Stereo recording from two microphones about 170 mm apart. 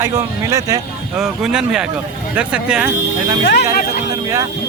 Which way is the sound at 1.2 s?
5° right (ahead or behind).